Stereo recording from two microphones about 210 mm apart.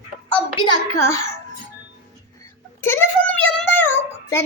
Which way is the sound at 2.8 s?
10° left (ahead or behind).